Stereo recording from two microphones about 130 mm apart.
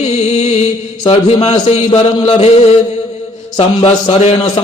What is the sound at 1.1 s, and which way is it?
A man's voice, 55° left (ahead or behind).